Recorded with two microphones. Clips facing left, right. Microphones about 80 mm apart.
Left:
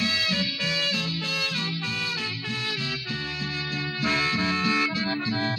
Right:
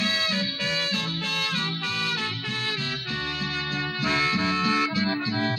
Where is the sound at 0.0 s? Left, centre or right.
Right.